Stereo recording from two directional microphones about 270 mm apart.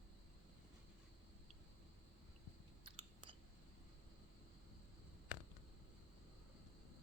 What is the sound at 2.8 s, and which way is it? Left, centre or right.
Chewing, centre.